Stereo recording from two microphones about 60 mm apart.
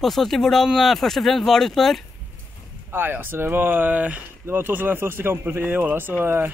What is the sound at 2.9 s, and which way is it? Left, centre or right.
Speech, right.